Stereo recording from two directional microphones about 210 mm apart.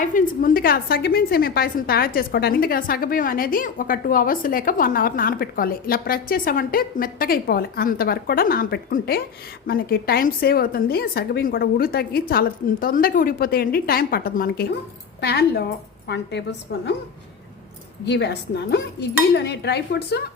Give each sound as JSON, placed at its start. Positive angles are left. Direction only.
{"t": 0.0, "sound": "a woman's voice", "side_deg": 40}
{"t": 18.0, "sound": "a woman's voice", "side_deg": 55}